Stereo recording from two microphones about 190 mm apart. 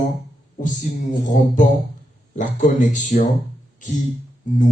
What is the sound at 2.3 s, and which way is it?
Speech, 40° left (ahead or behind).